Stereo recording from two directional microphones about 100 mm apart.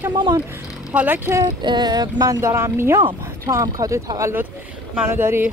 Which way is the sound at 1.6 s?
45° right (ahead or behind).